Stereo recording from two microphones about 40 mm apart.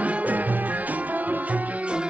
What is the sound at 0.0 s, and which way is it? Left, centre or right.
Music, right.